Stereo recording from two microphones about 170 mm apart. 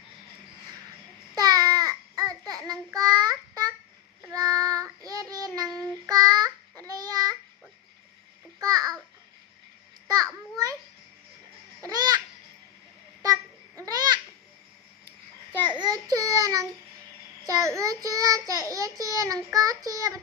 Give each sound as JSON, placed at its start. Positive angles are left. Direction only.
{"t": 1.4, "sound": "child singing", "side_deg": -20}
{"t": 8.6, "sound": "babbling", "side_deg": -20}
{"t": 11.8, "sound": "babbling", "side_deg": -20}
{"t": 13.2, "sound": "babbling", "side_deg": -20}
{"t": 15.7, "sound": "a sound", "side_deg": -25}
{"t": 17.4, "sound": "child singing", "side_deg": -20}